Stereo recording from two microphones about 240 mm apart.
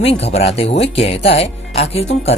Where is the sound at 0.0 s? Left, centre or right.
Left.